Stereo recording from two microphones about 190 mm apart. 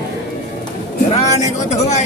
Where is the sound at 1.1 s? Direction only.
35° left (ahead or behind).